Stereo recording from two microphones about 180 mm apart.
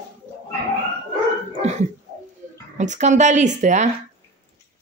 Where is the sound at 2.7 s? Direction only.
40° right (ahead or behind).